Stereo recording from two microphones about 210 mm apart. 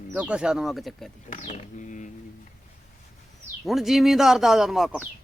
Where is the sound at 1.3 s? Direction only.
35° left (ahead or behind).